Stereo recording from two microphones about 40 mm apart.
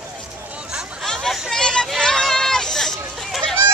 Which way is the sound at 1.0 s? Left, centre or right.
Centre.